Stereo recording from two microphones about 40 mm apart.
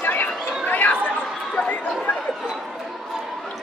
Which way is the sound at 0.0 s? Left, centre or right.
Left.